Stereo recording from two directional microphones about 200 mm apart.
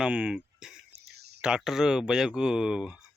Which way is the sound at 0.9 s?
55° right (ahead or behind).